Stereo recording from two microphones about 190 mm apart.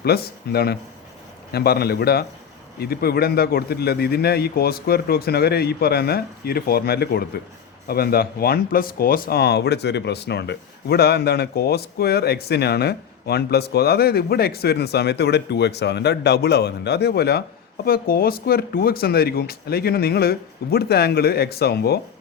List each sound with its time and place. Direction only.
0.0 s speech: 55° left (ahead or behind)